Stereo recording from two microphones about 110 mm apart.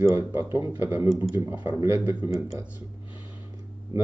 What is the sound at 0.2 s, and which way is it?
Speech, 20° right (ahead or behind).